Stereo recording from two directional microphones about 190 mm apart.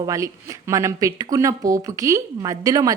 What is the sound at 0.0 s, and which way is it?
Speech, 15° right (ahead or behind).